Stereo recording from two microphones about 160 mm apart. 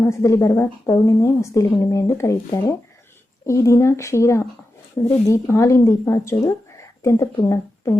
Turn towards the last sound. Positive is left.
turn(degrees=25)  # may be behind; listen again after turning